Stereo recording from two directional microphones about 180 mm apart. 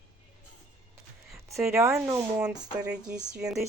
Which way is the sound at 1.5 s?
15° right (ahead or behind).